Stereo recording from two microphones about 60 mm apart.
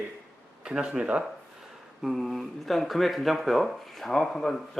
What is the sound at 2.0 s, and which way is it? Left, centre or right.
Speech, centre.